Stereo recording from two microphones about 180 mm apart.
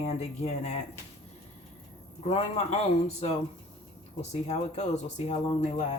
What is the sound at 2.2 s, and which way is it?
Speech, 35° left (ahead or behind).